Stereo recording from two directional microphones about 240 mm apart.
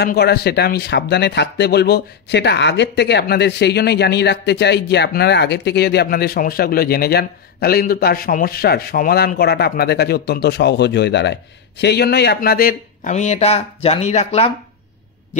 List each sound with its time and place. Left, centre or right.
0.0 s speech: left